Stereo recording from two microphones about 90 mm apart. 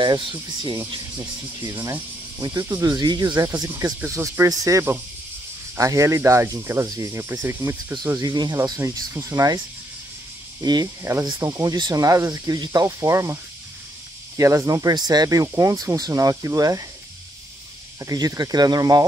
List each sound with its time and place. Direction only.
0.0 s speech: 65° right (ahead or behind)
1.1 s speech: 30° right (ahead or behind)
8.2 s speech: 50° right (ahead or behind)
10.6 s speech: 45° right (ahead or behind)
11.0 s speech: 30° right (ahead or behind)
12.8 s speech: 35° right (ahead or behind)
18.0 s speech: 40° right (ahead or behind)